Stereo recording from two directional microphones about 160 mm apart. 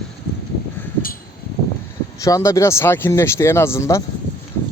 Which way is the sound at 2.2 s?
20° left (ahead or behind).